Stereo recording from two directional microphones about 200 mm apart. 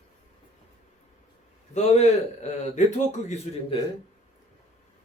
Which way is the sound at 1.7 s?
35° left (ahead or behind).